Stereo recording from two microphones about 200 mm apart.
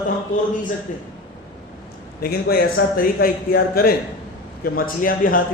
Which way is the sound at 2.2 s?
50° left (ahead or behind).